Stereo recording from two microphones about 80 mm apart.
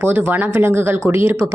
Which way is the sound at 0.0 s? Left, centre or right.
Right.